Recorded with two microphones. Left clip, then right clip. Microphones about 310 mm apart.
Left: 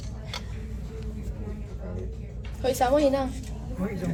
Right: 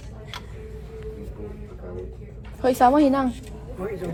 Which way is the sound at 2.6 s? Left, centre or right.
Right.